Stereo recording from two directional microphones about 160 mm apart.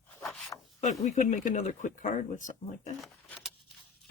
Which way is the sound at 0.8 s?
45° left (ahead or behind).